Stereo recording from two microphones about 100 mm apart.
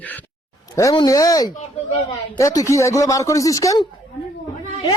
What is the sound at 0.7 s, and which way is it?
Speech, 35° left (ahead or behind).